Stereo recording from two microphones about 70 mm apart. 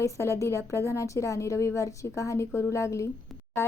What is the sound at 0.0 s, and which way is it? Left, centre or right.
A woman's voice, left.